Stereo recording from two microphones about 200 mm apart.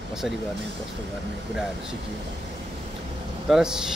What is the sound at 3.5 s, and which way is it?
Speech, 5° right (ahead or behind).